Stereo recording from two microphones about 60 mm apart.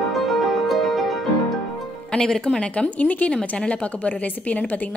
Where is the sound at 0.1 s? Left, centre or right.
Centre.